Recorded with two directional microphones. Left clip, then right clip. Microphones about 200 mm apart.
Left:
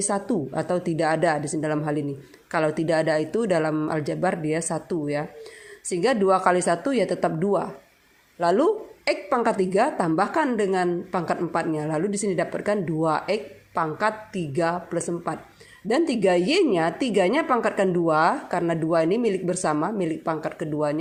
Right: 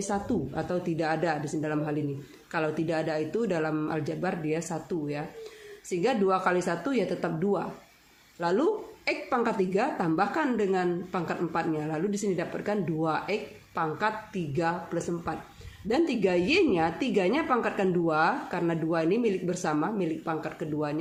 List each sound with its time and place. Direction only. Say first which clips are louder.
0.0 s a woman's voice: left 5 dB; 35° left (ahead or behind)